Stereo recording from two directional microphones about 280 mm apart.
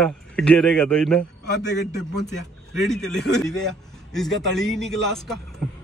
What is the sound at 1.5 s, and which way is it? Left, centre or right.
Speech, left.